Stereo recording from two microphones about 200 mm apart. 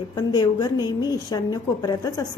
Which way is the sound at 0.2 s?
20° left (ahead or behind).